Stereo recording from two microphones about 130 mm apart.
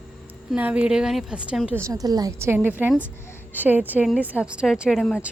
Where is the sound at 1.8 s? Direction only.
25° right (ahead or behind).